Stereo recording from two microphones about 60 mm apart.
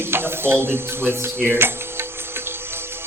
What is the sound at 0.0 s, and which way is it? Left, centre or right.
Speech, right.